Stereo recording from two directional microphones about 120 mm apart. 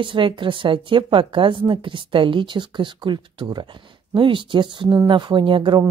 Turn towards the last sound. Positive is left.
turn(degrees=-45)  # may be behind; listen again after turning